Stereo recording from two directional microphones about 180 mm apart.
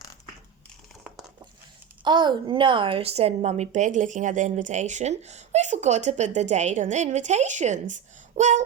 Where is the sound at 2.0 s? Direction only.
25° right (ahead or behind).